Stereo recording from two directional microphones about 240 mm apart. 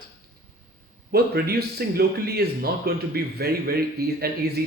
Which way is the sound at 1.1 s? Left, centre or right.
Right.